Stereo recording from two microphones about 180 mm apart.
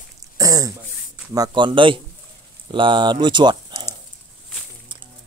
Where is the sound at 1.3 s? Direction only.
25° right (ahead or behind).